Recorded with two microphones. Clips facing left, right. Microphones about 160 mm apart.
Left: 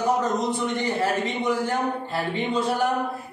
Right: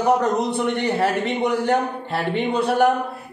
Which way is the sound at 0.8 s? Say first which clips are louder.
Right 3 dB; 65° right (ahead or behind).